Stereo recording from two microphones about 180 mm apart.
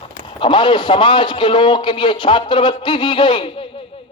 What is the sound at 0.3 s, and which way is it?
A man's voice, 30° left (ahead or behind).